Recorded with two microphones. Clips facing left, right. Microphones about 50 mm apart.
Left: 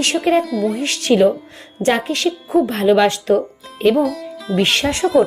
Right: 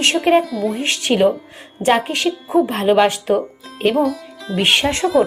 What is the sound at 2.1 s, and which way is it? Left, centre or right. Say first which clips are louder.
A woman's voice: left 1 dB; right.